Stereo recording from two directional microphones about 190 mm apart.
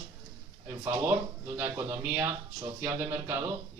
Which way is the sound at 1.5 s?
10° right (ahead or behind).